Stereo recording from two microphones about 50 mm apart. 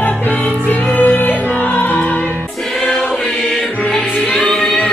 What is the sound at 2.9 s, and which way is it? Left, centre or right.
Choir, left.